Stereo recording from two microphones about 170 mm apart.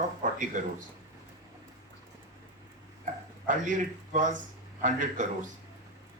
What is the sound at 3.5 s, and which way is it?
Speech, 50° right (ahead or behind).